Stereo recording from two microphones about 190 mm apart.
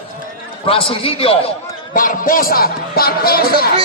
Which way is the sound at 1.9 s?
45° left (ahead or behind).